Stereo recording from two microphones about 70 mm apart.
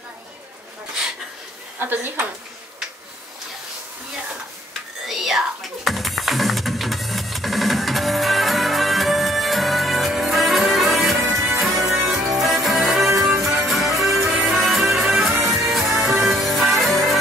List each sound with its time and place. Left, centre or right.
1.8 s speech: right
5.0 s music: centre